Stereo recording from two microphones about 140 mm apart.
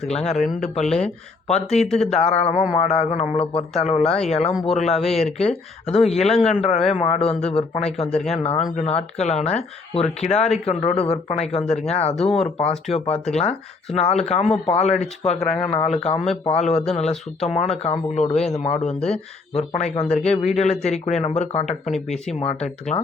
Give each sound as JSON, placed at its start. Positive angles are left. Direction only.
{"t": 0.1, "sound": "speech", "side_deg": 50}
{"t": 1.5, "sound": "speech", "side_deg": 50}
{"t": 1.8, "sound": "speech", "side_deg": 5}
{"t": 2.0, "sound": "speech", "side_deg": 50}
{"t": 18.9, "sound": "speech", "side_deg": 5}
{"t": 19.5, "sound": "speech", "side_deg": 50}